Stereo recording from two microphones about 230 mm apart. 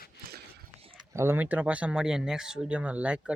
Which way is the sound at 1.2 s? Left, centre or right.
Centre.